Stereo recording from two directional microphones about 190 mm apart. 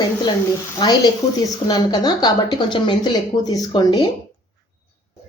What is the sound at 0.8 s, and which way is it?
A woman's voice, 20° left (ahead or behind).